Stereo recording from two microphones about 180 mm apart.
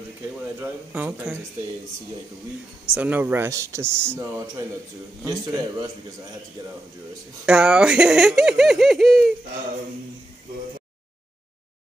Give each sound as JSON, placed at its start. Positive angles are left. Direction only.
{"t": 0.6, "sound": "speech", "side_deg": -10}
{"t": 2.9, "sound": "speech", "side_deg": -10}
{"t": 5.2, "sound": "a man's voice", "side_deg": -20}
{"t": 7.4, "sound": "speech", "side_deg": -5}